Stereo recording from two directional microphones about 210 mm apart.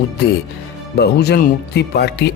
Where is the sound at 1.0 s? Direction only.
50° left (ahead or behind).